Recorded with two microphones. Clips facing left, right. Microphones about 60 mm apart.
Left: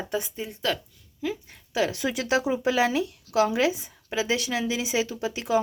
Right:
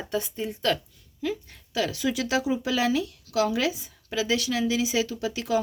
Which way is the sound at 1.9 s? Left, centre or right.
Left.